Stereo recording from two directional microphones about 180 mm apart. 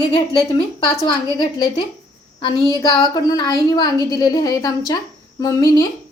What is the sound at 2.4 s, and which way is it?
A woman's voice, 25° left (ahead or behind).